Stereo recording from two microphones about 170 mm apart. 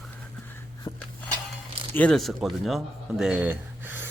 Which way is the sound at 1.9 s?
5° left (ahead or behind).